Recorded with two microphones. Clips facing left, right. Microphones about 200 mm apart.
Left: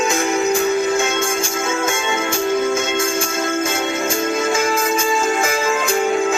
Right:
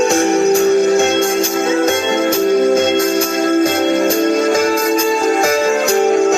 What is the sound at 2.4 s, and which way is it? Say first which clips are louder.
Music: right 6 dB; 30° right (ahead or behind).